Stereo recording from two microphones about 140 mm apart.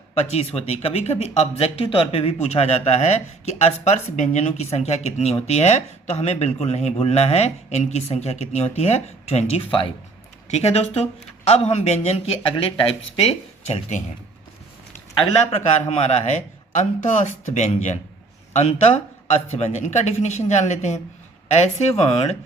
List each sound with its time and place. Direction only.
0.1 s speech: 50° left (ahead or behind)
15.4 s a man's voice: 55° left (ahead or behind)